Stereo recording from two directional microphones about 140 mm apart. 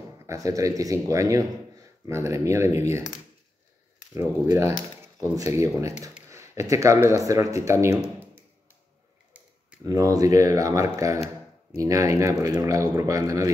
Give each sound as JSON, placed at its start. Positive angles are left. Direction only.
{"t": 0.3, "sound": "speech", "side_deg": -25}
{"t": 4.1, "sound": "speech", "side_deg": -20}
{"t": 6.2, "sound": "a sound", "side_deg": -20}
{"t": 7.1, "sound": "speech", "side_deg": -20}
{"t": 9.8, "sound": "speech", "side_deg": -25}